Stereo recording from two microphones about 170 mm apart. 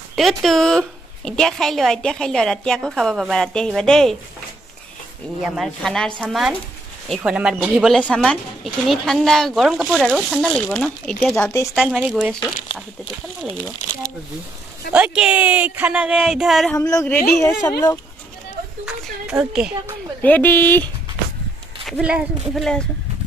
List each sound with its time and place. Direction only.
0.1 s a woman's voice: centre (ahead or behind)
5.4 s a woman's voice: centre (ahead or behind)
7.9 s a woman's voice: 5° left (ahead or behind)
14.9 s speech: 10° right (ahead or behind)
16.7 s a woman's voice: 20° left (ahead or behind)
18.9 s a woman's voice: 5° right (ahead or behind)
20.2 s speech: 10° left (ahead or behind)
21.8 s a woman's voice: 5° right (ahead or behind)